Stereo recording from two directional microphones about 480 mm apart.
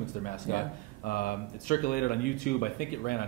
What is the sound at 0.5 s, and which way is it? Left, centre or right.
Speech, centre.